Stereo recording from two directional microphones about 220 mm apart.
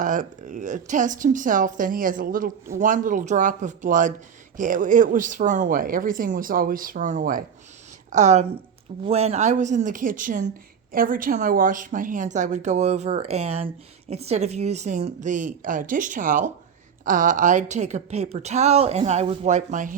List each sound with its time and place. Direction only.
0.0 s a woman's voice: 35° right (ahead or behind)